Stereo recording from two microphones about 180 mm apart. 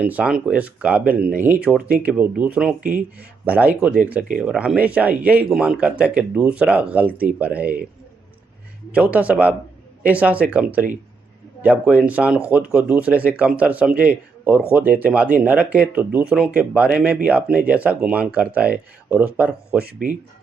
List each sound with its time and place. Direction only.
0.0 s speech: 10° right (ahead or behind)
8.9 s speech: 5° right (ahead or behind)
19.8 s speech: 60° right (ahead or behind)